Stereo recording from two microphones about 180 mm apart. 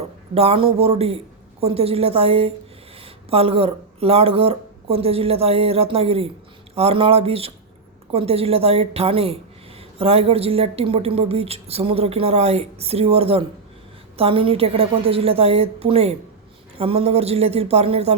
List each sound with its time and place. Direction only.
0.3 s a woman's voice: 30° right (ahead or behind)